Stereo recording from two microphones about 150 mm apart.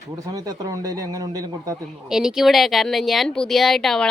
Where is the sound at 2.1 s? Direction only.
5° right (ahead or behind).